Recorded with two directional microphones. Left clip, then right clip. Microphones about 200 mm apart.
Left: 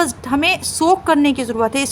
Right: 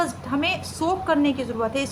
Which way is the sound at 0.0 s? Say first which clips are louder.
Left 7 dB; 55° left (ahead or behind).